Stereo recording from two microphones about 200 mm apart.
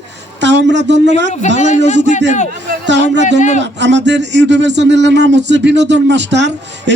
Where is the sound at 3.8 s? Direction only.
60° right (ahead or behind).